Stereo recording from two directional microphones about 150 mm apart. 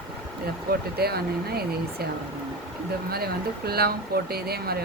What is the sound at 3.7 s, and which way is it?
Speech, 90° right.